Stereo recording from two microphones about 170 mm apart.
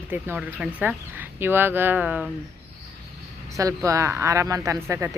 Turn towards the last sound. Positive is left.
turn(degrees=-15)  # may be behind; listen again after turning